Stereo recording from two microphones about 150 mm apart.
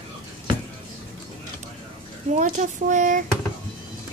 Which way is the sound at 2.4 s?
55° right (ahead or behind).